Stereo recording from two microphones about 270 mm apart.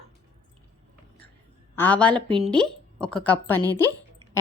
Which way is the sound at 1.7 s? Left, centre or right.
Centre.